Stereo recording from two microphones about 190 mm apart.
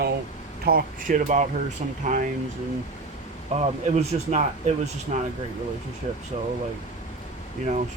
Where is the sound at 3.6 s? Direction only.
35° right (ahead or behind).